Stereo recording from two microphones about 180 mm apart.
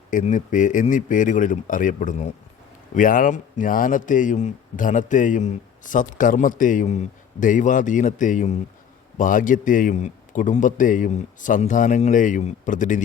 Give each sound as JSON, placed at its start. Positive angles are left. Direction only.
{"t": 0.1, "sound": "a man's voice", "side_deg": 45}